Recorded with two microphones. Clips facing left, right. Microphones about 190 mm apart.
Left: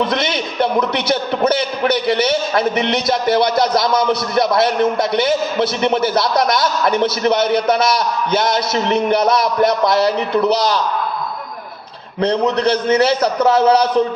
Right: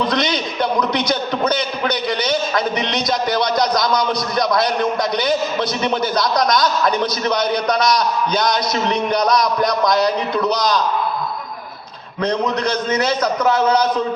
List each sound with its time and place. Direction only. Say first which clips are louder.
0.1 s a man's voice: even; 25° left (ahead or behind)
12.2 s a man's voice: left 4 dB; 30° left (ahead or behind)